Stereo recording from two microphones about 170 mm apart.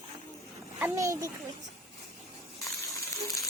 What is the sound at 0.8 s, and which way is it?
Speech, 20° right (ahead or behind).